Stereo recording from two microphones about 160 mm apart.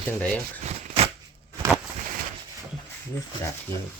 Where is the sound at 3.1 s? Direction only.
20° left (ahead or behind).